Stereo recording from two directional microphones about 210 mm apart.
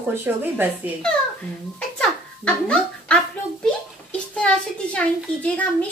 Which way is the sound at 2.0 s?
5° left (ahead or behind).